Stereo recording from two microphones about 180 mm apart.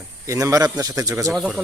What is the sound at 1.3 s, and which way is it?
Speech, 5° right (ahead or behind).